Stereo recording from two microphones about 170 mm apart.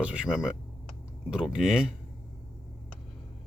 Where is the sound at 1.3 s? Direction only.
5° right (ahead or behind).